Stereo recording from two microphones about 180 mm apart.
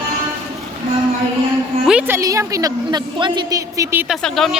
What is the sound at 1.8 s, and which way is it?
A woman's voice, 10° right (ahead or behind).